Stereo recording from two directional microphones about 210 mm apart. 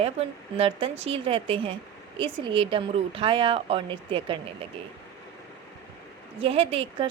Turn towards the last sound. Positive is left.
turn(degrees=-25)  # may be behind; listen again after turning